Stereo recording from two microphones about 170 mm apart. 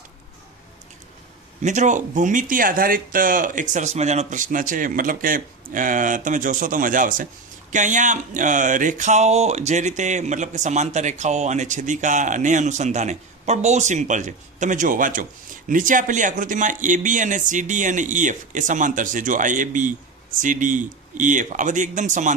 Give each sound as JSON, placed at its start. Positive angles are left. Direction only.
{"t": 1.6, "sound": "speech", "side_deg": -45}